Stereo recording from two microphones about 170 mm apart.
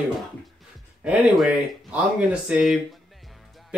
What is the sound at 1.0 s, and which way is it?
Speech, 5° right (ahead or behind).